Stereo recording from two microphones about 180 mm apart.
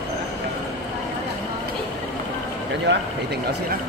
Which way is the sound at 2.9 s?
75° right (ahead or behind).